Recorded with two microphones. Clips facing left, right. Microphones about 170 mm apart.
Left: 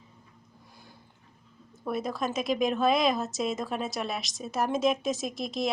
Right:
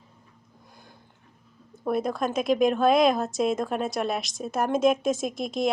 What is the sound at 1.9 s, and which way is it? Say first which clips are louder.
A woman's voice: right 5 dB; centre (ahead or behind).